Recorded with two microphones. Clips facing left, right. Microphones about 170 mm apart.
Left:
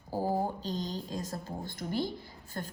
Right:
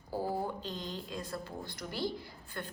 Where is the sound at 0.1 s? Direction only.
45° left (ahead or behind).